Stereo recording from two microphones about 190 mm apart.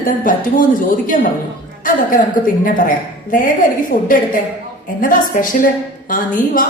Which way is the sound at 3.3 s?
45° left (ahead or behind).